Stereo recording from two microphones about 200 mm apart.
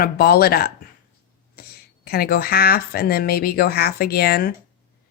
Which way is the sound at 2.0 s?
50° left (ahead or behind).